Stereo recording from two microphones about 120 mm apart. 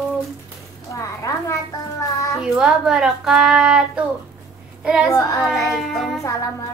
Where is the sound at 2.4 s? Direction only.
5° right (ahead or behind).